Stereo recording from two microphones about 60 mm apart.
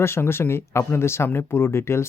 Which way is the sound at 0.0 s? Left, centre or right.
Left.